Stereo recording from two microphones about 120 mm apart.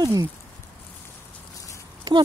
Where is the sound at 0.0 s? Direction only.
30° right (ahead or behind).